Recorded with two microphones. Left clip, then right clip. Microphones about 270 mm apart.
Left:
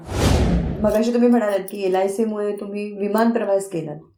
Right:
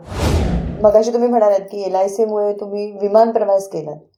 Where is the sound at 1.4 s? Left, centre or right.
Centre.